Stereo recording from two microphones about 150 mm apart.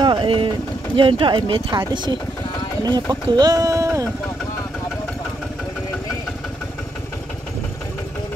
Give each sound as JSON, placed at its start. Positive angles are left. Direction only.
{"t": 0.0, "sound": "vehicle", "side_deg": -35}
{"t": 0.9, "sound": "speech", "side_deg": -35}
{"t": 2.8, "sound": "speech", "side_deg": -30}